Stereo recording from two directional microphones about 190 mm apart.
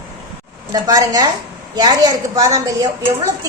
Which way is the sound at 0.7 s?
20° right (ahead or behind).